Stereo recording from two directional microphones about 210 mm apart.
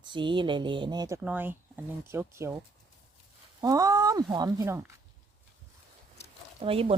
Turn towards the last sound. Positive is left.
turn(degrees=-25)  # may be behind; listen again after turning